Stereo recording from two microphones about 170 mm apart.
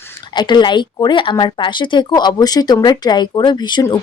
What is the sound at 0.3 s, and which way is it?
Speech, 25° left (ahead or behind).